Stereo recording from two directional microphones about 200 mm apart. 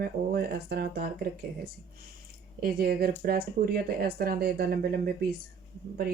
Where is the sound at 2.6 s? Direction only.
50° right (ahead or behind).